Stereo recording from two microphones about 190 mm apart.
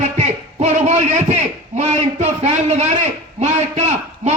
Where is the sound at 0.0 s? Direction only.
35° right (ahead or behind).